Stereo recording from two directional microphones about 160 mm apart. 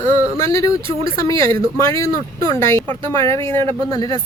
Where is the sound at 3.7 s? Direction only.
35° right (ahead or behind).